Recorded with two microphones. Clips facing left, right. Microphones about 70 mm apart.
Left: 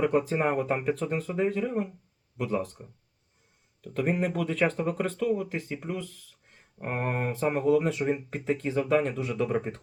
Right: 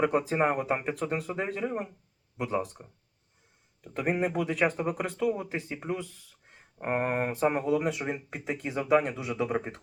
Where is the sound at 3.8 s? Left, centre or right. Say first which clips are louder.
Left 1 dB; centre.